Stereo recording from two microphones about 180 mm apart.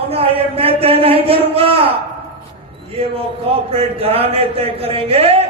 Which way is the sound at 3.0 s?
35° right (ahead or behind).